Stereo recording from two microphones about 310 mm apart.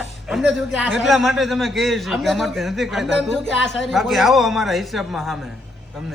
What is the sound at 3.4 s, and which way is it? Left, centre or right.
Speech, left.